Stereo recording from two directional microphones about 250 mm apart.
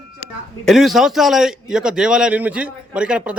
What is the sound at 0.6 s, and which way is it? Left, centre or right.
A man's voice, centre.